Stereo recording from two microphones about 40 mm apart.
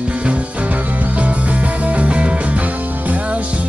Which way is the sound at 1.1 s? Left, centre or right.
Right.